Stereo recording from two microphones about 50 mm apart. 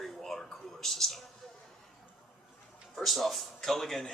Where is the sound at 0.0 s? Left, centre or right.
Centre.